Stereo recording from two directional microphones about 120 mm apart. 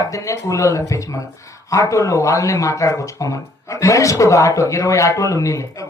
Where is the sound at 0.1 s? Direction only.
25° left (ahead or behind).